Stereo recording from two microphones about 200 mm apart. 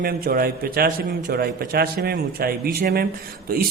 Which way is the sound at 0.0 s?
45° right (ahead or behind).